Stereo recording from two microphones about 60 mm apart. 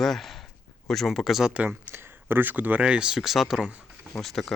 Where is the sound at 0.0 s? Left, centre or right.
Centre.